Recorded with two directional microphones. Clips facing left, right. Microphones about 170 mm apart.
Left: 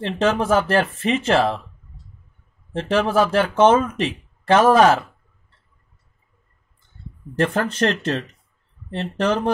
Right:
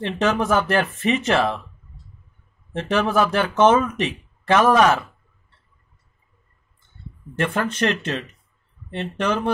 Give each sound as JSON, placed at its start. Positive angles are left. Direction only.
{"t": 0.0, "sound": "speech", "side_deg": 30}
{"t": 2.7, "sound": "speech", "side_deg": 30}
{"t": 7.3, "sound": "speech", "side_deg": 35}